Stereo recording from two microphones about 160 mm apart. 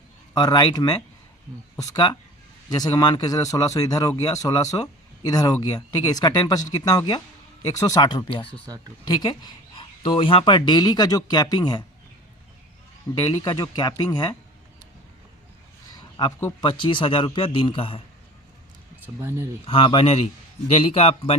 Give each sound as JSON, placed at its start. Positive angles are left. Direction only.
{"t": 0.3, "sound": "speech", "side_deg": 25}
{"t": 8.4, "sound": "speech", "side_deg": -25}
{"t": 9.0, "sound": "speech", "side_deg": 25}
{"t": 13.1, "sound": "speech", "side_deg": 30}
{"t": 16.4, "sound": "speech", "side_deg": 15}
{"t": 16.6, "sound": "a man's voice", "side_deg": 30}
{"t": 19.0, "sound": "speech", "side_deg": -15}
{"t": 19.6, "sound": "a man's voice", "side_deg": 35}